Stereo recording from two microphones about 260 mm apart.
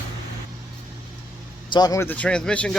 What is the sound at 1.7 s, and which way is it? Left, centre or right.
Speech, centre.